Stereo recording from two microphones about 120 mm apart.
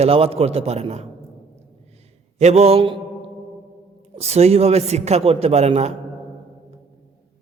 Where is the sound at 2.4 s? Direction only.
65° right (ahead or behind).